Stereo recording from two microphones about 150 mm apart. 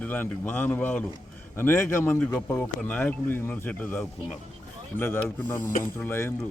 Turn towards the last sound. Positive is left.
turn(degrees=15)  # may be behind; listen again after turning